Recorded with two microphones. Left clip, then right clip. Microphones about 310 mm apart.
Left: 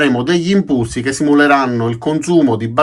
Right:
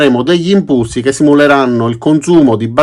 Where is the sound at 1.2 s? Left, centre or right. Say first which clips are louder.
Right 3 dB; centre.